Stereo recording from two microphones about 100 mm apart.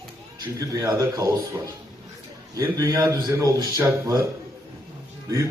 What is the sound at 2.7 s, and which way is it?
A man's voice, 40° right (ahead or behind).